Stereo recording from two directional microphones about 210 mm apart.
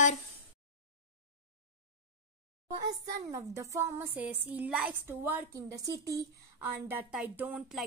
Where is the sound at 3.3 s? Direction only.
15° right (ahead or behind).